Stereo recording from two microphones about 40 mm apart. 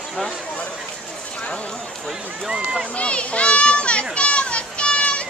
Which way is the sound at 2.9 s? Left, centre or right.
Left.